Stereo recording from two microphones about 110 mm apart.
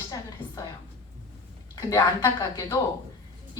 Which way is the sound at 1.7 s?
35° left (ahead or behind).